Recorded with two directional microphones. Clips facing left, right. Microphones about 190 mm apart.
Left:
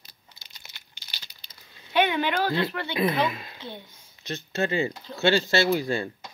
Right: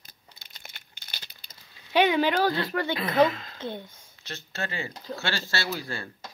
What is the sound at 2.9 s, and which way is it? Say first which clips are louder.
Speech: right 4 dB; 15° left (ahead or behind).